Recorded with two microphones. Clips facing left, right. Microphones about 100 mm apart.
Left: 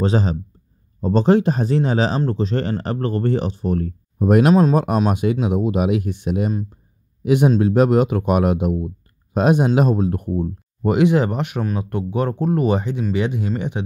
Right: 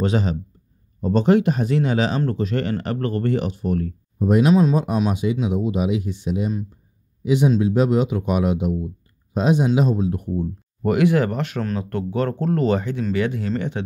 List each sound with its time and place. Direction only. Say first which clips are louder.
0.0 s speech: left 2 dB; 35° left (ahead or behind)
4.2 s speech: left 2 dB; 60° left (ahead or behind)
10.8 s speech: left 2 dB; 20° left (ahead or behind)